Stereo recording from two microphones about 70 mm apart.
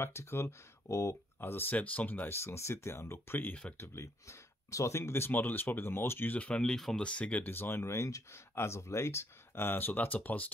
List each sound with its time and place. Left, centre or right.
0.0 s speech: left
1.4 s speech: left
3.3 s speech: left
3.7 s speech: left
6.6 s speech: centre
7.1 s speech: centre